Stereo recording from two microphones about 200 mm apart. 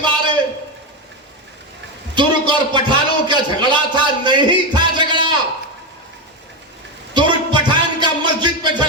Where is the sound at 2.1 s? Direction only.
25° right (ahead or behind).